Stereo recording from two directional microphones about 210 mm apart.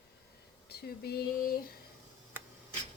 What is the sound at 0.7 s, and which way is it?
Speech, 50° left (ahead or behind).